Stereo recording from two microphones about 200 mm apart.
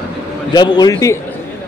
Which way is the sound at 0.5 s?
20° left (ahead or behind).